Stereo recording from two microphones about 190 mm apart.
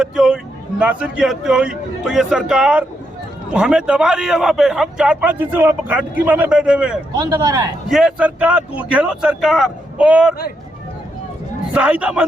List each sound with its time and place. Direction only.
0.0 s a man's voice: 5° right (ahead or behind)
7.2 s speech: 20° right (ahead or behind)
7.9 s a man's voice: centre (ahead or behind)
11.7 s a man's voice: 5° right (ahead or behind)